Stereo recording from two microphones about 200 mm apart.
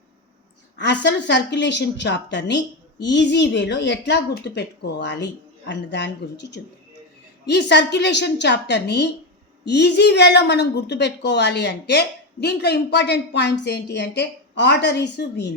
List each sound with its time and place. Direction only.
0.8 s a woman's voice: 60° left (ahead or behind)